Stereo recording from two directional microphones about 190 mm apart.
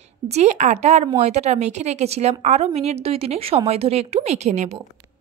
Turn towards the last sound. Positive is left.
turn(degrees=-35)  # may be behind; listen again after turning